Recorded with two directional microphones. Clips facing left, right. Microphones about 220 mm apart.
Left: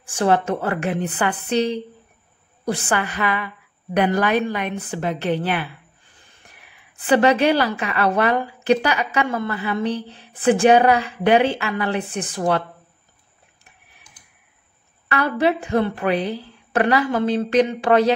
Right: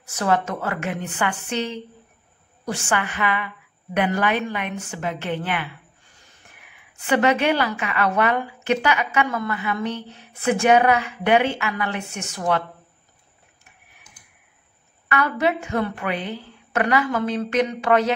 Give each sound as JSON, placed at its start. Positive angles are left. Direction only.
{"t": 0.0, "sound": "a woman's voice", "side_deg": 30}
{"t": 15.0, "sound": "a woman's voice", "side_deg": 30}